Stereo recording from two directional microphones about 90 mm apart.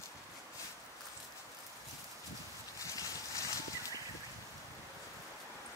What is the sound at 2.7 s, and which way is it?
Fowl, 40° left (ahead or behind).